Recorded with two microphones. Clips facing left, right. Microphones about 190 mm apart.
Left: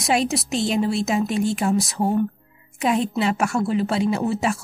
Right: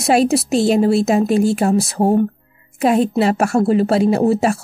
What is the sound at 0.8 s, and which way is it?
Speech, 60° right (ahead or behind).